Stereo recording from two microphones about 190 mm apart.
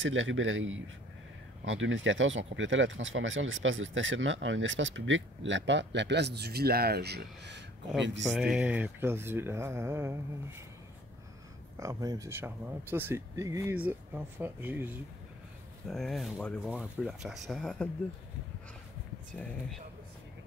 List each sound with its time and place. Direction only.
0.0 s speech: 85° right; by 7.6 s 60° right (ahead or behind)
8.0 s speech: 70° right (ahead or behind)
8.4 s speech: 5° right (ahead or behind)
11.7 s speech: 15° right (ahead or behind)
15.9 s speech: centre (ahead or behind)